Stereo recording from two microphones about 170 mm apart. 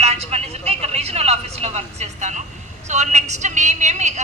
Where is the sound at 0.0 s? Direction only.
40° right (ahead or behind).